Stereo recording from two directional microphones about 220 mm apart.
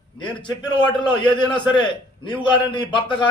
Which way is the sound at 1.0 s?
20° left (ahead or behind).